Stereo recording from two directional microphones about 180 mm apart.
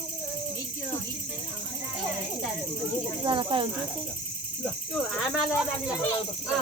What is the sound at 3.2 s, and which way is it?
Speech, 30° right (ahead or behind).